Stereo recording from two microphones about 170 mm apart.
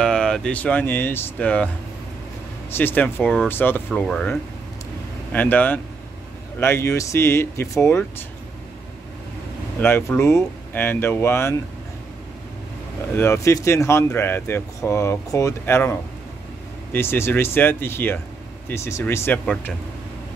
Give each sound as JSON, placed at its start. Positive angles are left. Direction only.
{"t": 0.0, "sound": "speech", "side_deg": 5}
{"t": 2.7, "sound": "speech", "side_deg": 10}
{"t": 9.8, "sound": "speech", "side_deg": 15}
{"t": 13.1, "sound": "speech", "side_deg": 15}